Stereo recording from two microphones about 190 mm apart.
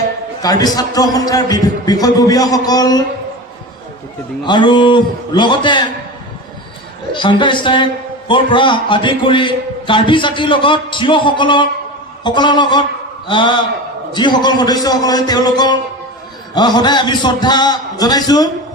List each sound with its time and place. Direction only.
0.4 s a man's voice: 20° left (ahead or behind)
4.4 s a man's voice: 25° left (ahead or behind)
7.1 s a man's voice: 25° left (ahead or behind)